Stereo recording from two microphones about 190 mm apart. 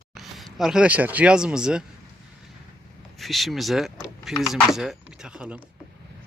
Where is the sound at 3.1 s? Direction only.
Centre (ahead or behind).